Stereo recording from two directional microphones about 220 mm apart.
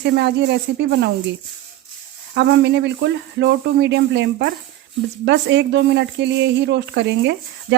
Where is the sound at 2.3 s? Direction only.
50° right (ahead or behind).